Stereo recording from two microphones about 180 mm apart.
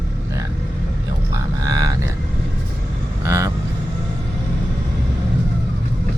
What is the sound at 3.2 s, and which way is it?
Vehicle, 15° right (ahead or behind).